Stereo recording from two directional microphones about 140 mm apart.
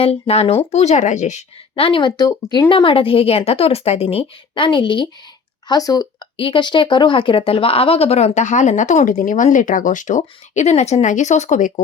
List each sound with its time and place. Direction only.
0.0 s a woman's voice: 45° left (ahead or behind)